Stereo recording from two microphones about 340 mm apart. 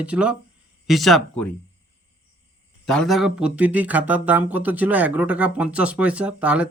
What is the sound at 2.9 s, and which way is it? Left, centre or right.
Speech, centre.